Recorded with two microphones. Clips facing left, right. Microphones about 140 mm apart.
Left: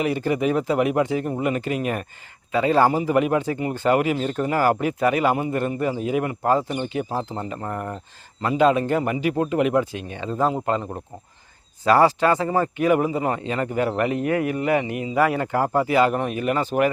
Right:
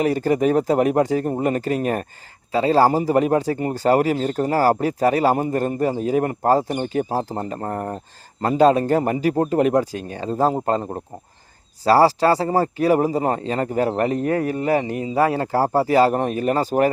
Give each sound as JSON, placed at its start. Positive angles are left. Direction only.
{"t": 0.0, "sound": "speech", "side_deg": -40}
{"t": 11.9, "sound": "speech", "side_deg": -35}